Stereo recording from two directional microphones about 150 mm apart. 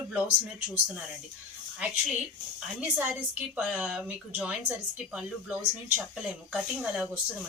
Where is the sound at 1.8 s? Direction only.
10° right (ahead or behind).